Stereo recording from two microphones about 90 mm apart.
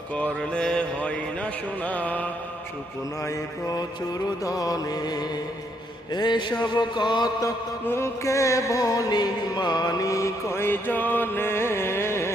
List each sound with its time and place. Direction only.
0.2 s mantra: 15° left (ahead or behind)
3.2 s music: 45° left (ahead or behind)
6.1 s a sound: 55° left (ahead or behind)
7.4 s music: 30° left (ahead or behind)